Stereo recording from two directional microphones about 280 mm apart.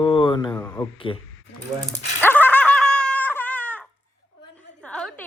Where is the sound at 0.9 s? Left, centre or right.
Centre.